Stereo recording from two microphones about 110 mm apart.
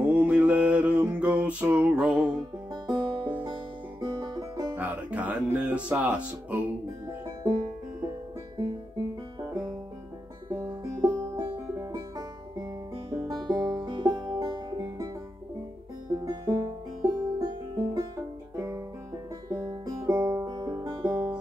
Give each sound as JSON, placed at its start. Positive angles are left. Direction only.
{"t": 0.1, "sound": "music", "side_deg": -15}
{"t": 2.7, "sound": "music", "side_deg": -40}
{"t": 4.7, "sound": "speech", "side_deg": -15}
{"t": 7.4, "sound": "music", "side_deg": -40}
{"t": 9.5, "sound": "music", "side_deg": -40}
{"t": 13.3, "sound": "music", "side_deg": -40}
{"t": 16.1, "sound": "music", "side_deg": -35}
{"t": 19.7, "sound": "music", "side_deg": -35}